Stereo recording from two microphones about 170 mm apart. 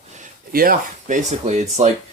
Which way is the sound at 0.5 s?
60° right (ahead or behind).